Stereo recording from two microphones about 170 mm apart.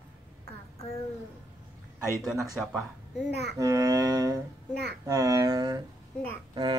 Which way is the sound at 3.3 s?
75° right (ahead or behind).